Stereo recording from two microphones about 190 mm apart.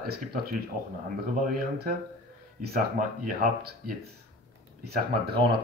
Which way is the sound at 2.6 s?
50° right (ahead or behind).